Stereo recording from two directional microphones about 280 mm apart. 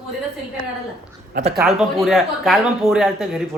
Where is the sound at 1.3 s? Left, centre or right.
Right.